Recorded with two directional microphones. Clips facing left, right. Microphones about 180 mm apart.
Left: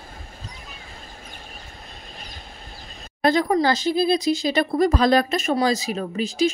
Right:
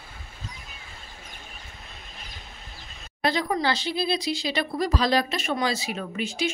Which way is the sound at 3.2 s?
50° left (ahead or behind).